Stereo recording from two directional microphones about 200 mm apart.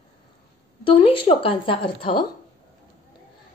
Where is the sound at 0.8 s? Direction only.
25° left (ahead or behind).